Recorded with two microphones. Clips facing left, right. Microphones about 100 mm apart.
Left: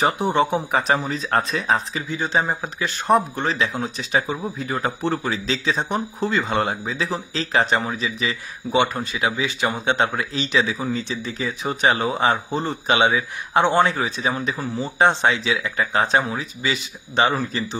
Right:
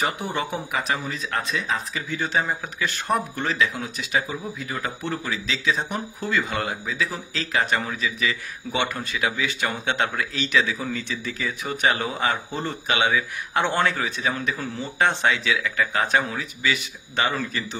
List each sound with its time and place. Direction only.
0.0 s speech: 25° left (ahead or behind)
2.0 s speech: 20° left (ahead or behind)